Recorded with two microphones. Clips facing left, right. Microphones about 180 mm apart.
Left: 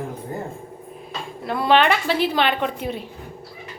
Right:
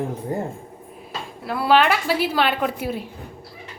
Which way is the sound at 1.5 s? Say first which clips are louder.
Even; 5° right (ahead or behind).